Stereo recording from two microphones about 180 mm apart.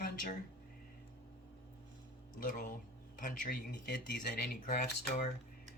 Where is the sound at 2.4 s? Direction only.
50° left (ahead or behind).